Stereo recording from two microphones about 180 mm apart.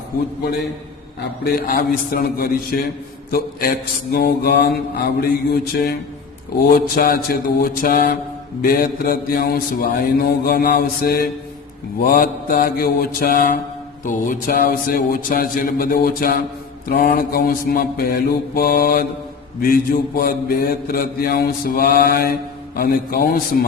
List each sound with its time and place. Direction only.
1.5 s a man's voice: 55° left (ahead or behind)